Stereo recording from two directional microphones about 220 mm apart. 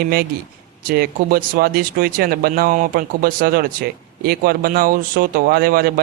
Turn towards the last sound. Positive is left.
turn(degrees=-45)  # may be behind; listen again after turning